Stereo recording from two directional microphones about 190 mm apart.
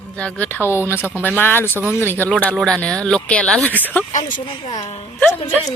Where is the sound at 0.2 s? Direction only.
5° left (ahead or behind).